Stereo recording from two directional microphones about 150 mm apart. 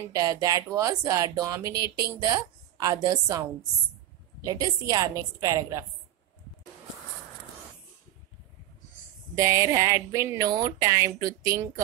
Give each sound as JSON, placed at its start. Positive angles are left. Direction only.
{"t": 0.0, "sound": "speech", "side_deg": -25}
{"t": 9.3, "sound": "speech", "side_deg": -20}